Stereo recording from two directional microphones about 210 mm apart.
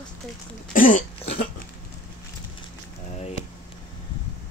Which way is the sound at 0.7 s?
40° left (ahead or behind).